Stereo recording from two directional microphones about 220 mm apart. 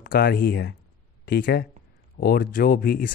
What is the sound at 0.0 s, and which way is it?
Speech, 45° left (ahead or behind).